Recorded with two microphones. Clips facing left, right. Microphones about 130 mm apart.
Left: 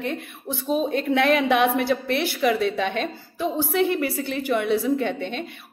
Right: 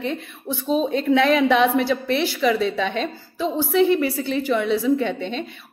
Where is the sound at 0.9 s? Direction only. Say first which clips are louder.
Right 2 dB; 50° left (ahead or behind).